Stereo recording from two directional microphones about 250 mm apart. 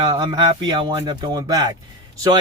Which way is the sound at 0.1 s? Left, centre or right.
Centre.